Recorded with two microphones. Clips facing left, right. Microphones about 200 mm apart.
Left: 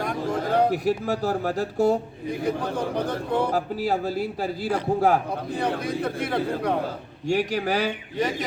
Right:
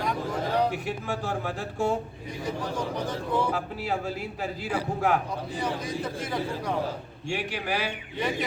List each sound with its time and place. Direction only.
0.0 s speech: 50° left (ahead or behind)
2.4 s speech: 60° left (ahead or behind)
3.5 s a man's voice: 40° left (ahead or behind)
5.5 s speech: 60° left (ahead or behind)
7.3 s a man's voice: 40° left (ahead or behind)